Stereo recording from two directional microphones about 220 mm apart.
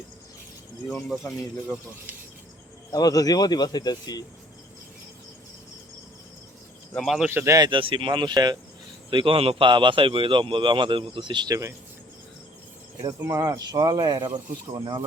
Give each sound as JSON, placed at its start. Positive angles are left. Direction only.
{"t": 0.9, "sound": "speech", "side_deg": 0}
{"t": 2.9, "sound": "speech", "side_deg": 15}
{"t": 6.9, "sound": "speech", "side_deg": 0}
{"t": 13.0, "sound": "speech", "side_deg": -15}